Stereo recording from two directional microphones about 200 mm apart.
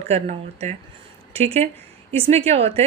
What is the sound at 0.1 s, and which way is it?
A woman's voice, 35° right (ahead or behind).